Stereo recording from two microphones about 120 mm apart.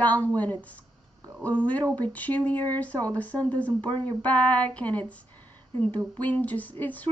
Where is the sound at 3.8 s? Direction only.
45° right (ahead or behind).